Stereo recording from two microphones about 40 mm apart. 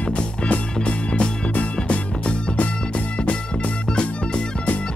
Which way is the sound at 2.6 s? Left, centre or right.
Left.